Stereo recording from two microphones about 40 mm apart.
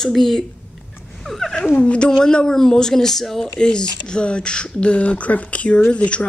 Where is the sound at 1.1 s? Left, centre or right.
Centre.